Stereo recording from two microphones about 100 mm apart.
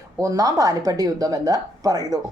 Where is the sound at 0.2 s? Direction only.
35° right (ahead or behind).